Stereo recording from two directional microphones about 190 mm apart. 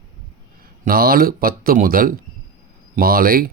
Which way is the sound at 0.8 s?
50° right (ahead or behind).